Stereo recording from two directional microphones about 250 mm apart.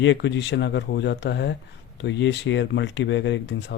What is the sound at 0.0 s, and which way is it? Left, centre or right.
A man's voice, left.